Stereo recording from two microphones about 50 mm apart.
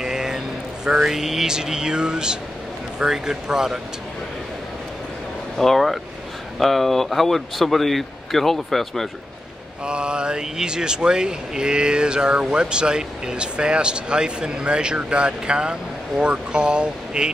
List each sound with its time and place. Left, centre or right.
0.0 s vehicle: centre
0.8 s speech: centre
5.6 s speech: centre
9.8 s speech: centre